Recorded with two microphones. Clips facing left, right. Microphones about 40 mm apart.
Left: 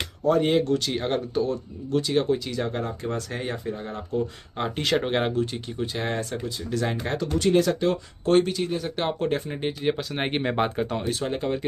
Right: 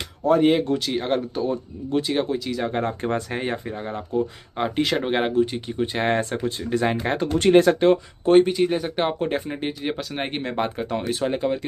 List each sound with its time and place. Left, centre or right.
0.2 s speech: centre
1.5 s speech: centre
2.2 s speech: centre
2.8 s speech: right
3.2 s speech: right
4.1 s speech: centre
5.9 s speech: right
7.3 s speech: right
8.3 s speech: centre
10.6 s speech: centre
11.1 s speech: centre
11.3 s speech: centre